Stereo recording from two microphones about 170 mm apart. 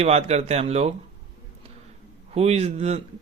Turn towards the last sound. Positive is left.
turn(degrees=-40)  # may be behind; listen again after turning